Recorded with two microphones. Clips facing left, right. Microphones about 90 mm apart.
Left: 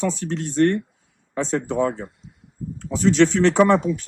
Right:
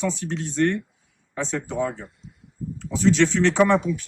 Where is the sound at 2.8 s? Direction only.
40° left (ahead or behind).